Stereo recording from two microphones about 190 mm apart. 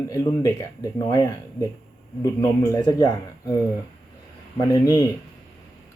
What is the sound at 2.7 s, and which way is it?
Speech, 20° left (ahead or behind).